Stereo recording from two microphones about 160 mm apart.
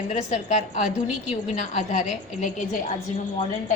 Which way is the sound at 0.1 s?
50° left (ahead or behind).